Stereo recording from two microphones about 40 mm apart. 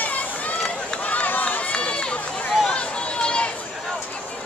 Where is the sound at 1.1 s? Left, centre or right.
Left.